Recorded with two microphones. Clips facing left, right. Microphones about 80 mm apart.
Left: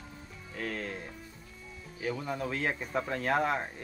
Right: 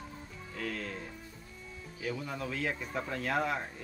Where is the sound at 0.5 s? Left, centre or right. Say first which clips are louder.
Left 2 dB; left.